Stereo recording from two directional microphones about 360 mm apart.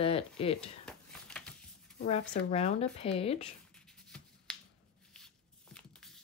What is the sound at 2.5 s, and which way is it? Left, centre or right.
Speech, centre.